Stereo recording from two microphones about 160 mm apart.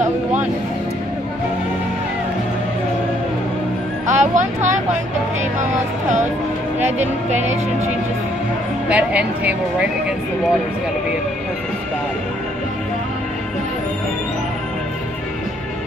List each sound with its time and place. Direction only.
4.1 s music: 50° right (ahead or behind)
5.6 s a sound: 50° right (ahead or behind)
8.8 s speech: 10° right (ahead or behind)